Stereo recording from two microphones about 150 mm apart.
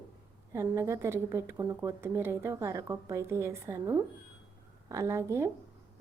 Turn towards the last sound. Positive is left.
turn(degrees=-20)  # may be behind; listen again after turning